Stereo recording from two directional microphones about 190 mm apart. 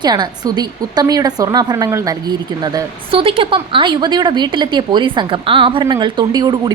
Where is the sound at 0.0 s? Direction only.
20° right (ahead or behind).